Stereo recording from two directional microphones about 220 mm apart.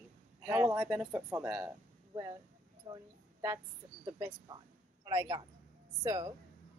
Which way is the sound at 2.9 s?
15° right (ahead or behind).